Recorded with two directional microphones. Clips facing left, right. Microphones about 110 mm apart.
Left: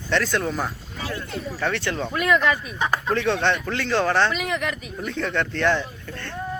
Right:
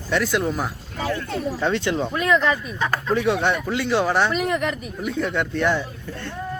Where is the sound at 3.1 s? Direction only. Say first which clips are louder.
Right 2 dB; 10° right (ahead or behind).